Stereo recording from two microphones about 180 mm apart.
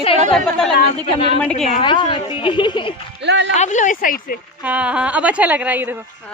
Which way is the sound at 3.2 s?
70° right (ahead or behind).